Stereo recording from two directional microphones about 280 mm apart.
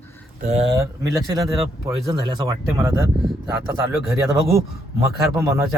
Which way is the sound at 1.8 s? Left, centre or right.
Centre.